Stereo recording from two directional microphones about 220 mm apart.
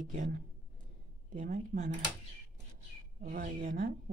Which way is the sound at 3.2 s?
35° right (ahead or behind).